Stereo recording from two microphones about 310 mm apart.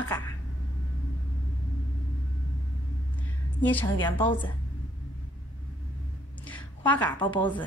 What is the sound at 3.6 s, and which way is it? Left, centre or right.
Speech, centre.